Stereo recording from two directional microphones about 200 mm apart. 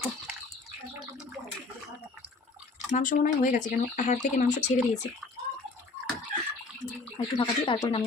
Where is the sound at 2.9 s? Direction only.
40° left (ahead or behind).